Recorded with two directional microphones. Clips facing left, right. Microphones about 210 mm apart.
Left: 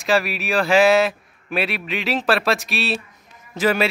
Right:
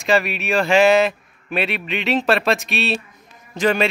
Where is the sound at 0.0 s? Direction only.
Centre (ahead or behind).